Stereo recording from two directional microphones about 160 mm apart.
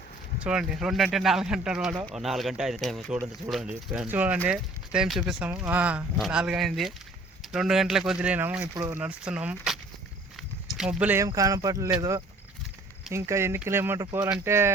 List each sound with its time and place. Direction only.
0.4 s speech: 5° right (ahead or behind)
8.7 s speech: 20° right (ahead or behind)
9.0 s speech: 5° right (ahead or behind)
10.8 s speech: 5° right (ahead or behind)
11.2 s speech: 20° right (ahead or behind)